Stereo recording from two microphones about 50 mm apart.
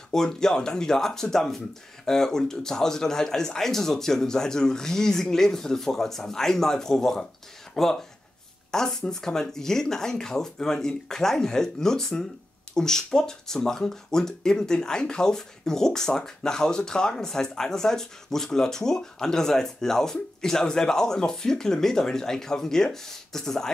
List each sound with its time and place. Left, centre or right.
0.1 s speech: centre